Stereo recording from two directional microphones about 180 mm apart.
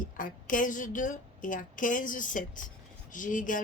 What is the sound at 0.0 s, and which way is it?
A woman's voice, 50° left (ahead or behind).